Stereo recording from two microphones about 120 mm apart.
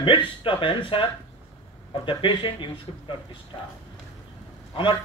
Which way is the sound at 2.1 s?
45° left (ahead or behind).